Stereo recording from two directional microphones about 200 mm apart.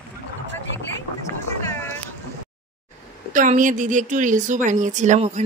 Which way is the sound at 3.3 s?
40° right (ahead or behind).